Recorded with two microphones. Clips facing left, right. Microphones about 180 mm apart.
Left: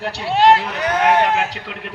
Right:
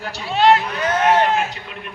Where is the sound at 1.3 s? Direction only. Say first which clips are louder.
Left 1 dB; 85° left.